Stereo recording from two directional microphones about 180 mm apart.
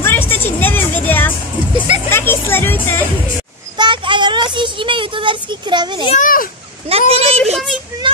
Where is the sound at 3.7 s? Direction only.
25° right (ahead or behind).